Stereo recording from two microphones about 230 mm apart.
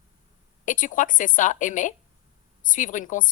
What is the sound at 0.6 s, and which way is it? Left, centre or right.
A woman's voice, left.